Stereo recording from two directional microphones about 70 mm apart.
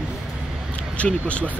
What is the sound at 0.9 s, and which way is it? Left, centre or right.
Speech, centre.